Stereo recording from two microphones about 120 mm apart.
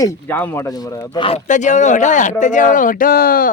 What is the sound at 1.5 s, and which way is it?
Speech, 90° left.